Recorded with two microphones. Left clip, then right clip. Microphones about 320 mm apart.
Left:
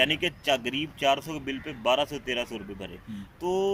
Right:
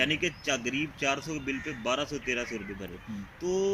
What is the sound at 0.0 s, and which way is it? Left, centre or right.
Speech, left.